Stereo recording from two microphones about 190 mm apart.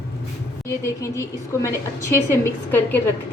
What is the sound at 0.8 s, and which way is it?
A woman's voice, 15° left (ahead or behind).